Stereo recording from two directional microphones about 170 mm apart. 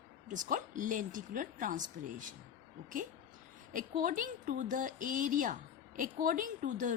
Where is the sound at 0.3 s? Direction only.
50° right (ahead or behind).